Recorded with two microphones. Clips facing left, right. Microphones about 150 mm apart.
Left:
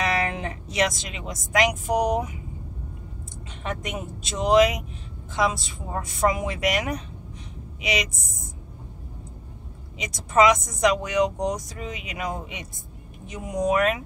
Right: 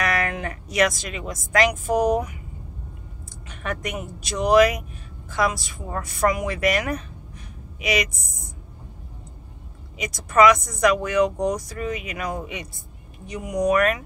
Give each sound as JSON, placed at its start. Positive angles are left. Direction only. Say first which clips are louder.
{"t": 0.0, "sound": "speech", "louder": "right 1 dB", "side_deg": 25}
{"t": 3.4, "sound": "a woman's voice", "louder": "right 2 dB", "side_deg": 25}
{"t": 9.9, "sound": "speech", "louder": "right 2 dB", "side_deg": 25}